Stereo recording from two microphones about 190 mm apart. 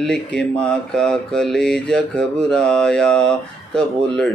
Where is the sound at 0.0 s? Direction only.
5° left (ahead or behind).